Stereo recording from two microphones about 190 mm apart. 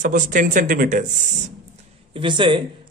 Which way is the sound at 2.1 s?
25° right (ahead or behind).